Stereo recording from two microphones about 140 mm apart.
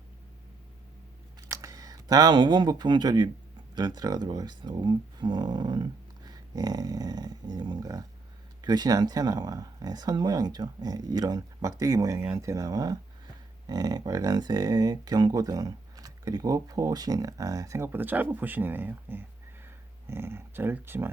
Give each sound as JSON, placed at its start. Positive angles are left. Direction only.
{"t": 1.5, "sound": "speech", "side_deg": -25}